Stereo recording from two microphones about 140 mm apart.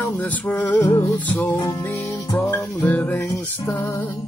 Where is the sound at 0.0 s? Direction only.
10° left (ahead or behind).